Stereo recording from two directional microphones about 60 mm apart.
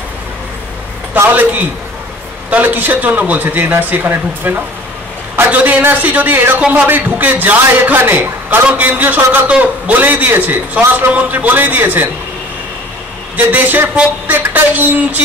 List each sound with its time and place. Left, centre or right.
1.1 s a man's voice: right
2.5 s speech: right
13.5 s speech: right